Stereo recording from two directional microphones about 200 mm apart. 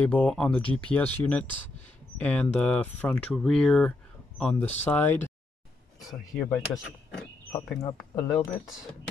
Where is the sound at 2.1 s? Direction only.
5° left (ahead or behind).